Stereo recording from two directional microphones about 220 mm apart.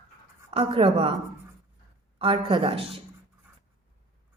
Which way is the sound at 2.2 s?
20° right (ahead or behind).